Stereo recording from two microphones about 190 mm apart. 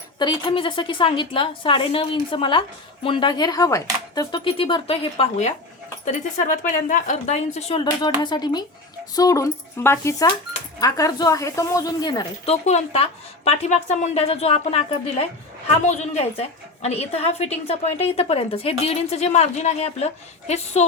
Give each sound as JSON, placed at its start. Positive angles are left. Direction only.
{"t": 0.2, "sound": "a woman's voice", "side_deg": 25}
{"t": 7.9, "sound": "a woman's voice", "side_deg": 20}
{"t": 12.5, "sound": "a woman's voice", "side_deg": 35}